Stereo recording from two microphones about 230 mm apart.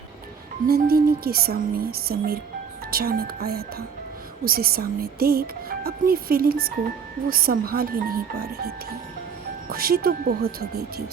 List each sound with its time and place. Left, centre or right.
0.7 s speech: right